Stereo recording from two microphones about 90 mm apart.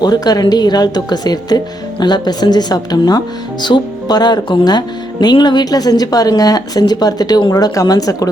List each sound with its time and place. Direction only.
0.0 s speech: 50° left (ahead or behind)